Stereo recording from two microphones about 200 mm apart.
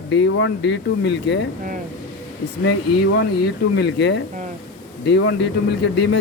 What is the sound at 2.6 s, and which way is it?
Speech, 65° left (ahead or behind).